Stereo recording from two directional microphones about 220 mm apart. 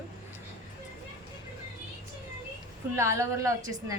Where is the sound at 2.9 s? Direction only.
10° right (ahead or behind).